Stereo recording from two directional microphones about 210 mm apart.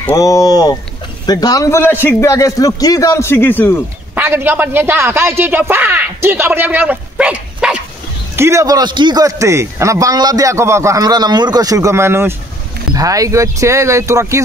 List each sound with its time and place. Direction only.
0.0 s a man's voice: 15° left (ahead or behind)
4.1 s speech: 10° right (ahead or behind)